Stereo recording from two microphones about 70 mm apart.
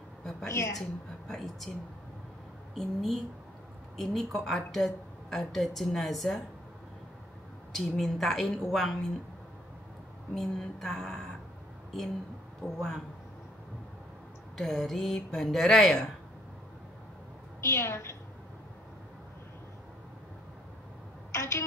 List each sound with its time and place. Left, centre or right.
0.2 s a sound: centre
0.5 s a woman's voice: left
0.7 s a woman's voice: centre
2.7 s a woman's voice: centre
7.7 s a woman's voice: centre
10.3 s speech: centre
12.6 s a woman's voice: centre
14.6 s a woman's voice: centre
17.6 s a woman's voice: left
21.3 s a sound: left